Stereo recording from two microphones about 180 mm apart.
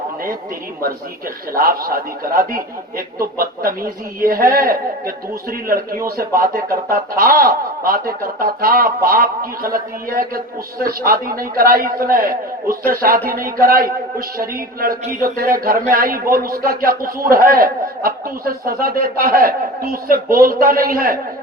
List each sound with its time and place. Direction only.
1.5 s speech: 55° right (ahead or behind)